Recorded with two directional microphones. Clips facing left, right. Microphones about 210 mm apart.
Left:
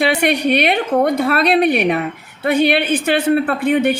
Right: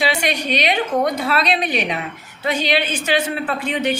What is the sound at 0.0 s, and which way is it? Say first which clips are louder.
A woman's voice: left 6 dB; 55° left (ahead or behind).